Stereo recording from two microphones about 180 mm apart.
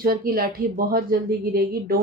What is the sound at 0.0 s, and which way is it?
Speech, 55° right (ahead or behind).